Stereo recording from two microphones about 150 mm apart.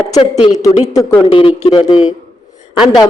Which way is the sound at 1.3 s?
35° left (ahead or behind).